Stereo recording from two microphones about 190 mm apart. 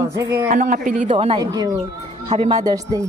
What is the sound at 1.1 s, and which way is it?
Speech, 30° right (ahead or behind).